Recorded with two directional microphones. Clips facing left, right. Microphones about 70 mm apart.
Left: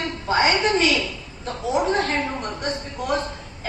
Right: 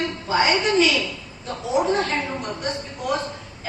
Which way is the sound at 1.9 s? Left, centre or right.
Left.